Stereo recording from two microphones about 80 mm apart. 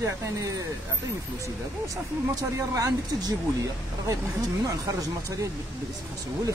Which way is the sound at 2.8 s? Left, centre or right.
Right.